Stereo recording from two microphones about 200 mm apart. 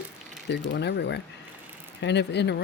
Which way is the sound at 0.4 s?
60° left (ahead or behind).